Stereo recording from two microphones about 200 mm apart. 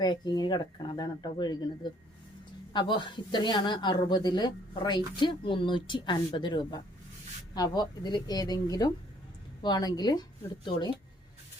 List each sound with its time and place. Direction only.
0.0 s a woman's voice: 20° left (ahead or behind)